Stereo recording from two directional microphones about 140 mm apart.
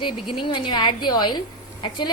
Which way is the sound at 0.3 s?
35° left (ahead or behind).